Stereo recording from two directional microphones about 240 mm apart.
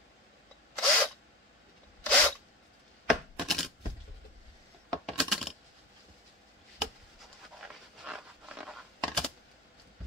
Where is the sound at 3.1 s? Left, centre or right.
Centre.